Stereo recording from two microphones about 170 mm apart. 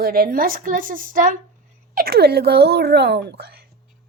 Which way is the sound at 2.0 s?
65° right (ahead or behind).